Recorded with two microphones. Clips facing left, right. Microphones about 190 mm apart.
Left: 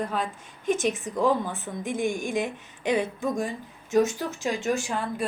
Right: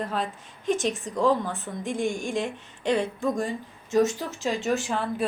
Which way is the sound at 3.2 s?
Centre (ahead or behind).